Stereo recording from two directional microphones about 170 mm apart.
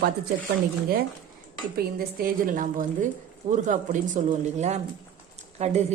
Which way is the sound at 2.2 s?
50° right (ahead or behind).